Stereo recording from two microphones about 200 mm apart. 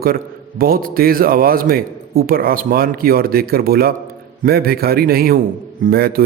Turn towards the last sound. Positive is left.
turn(degrees=-50)  # may be behind; listen again after turning